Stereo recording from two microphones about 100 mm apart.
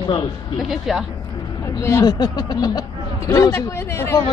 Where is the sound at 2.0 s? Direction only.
45° left (ahead or behind).